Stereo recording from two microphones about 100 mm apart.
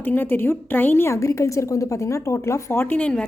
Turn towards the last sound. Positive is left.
turn(degrees=10)  # may be behind; listen again after turning